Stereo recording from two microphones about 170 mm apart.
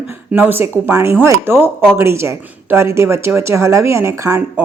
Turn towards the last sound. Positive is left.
turn(degrees=-15)  # may be behind; listen again after turning